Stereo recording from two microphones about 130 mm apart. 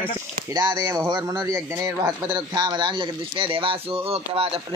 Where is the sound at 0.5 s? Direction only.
30° right (ahead or behind).